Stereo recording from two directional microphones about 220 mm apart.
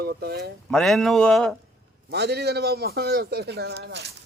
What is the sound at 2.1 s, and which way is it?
Speech, 50° right (ahead or behind).